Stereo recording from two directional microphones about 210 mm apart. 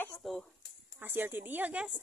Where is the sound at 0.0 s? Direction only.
5° left (ahead or behind).